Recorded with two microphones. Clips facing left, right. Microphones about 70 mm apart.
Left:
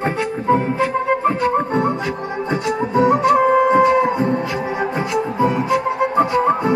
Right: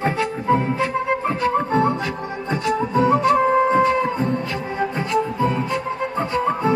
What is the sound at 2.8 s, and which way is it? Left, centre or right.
Flute, left.